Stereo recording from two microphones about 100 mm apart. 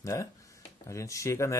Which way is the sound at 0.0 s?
30° left (ahead or behind).